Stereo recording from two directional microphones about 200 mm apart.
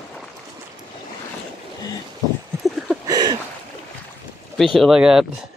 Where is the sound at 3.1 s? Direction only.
20° right (ahead or behind).